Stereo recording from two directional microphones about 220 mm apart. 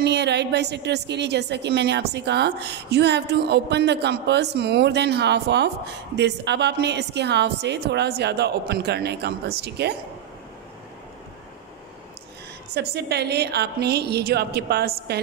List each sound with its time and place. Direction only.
0.0 s a woman's voice: 50° right (ahead or behind)
12.7 s a woman's voice: 50° right (ahead or behind)